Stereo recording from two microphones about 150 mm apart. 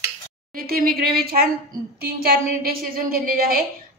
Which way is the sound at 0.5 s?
85° right.